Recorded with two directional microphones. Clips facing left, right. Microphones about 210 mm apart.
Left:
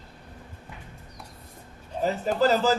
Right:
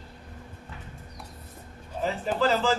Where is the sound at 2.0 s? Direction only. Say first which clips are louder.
Left 3 dB; 40° left (ahead or behind).